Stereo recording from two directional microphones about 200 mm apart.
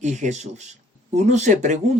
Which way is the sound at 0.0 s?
35° right (ahead or behind).